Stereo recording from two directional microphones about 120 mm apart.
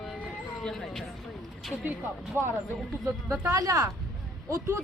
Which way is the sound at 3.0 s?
20° right (ahead or behind).